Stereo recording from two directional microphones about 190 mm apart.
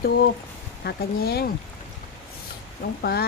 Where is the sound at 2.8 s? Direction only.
55° left (ahead or behind).